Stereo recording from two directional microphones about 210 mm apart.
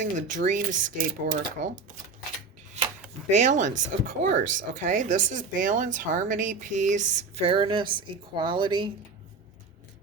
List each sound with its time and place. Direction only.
0.0 s speech: 35° right (ahead or behind)
3.2 s speech: 35° right (ahead or behind)